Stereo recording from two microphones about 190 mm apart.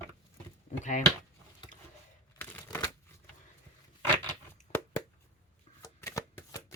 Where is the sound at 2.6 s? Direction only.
20° left (ahead or behind).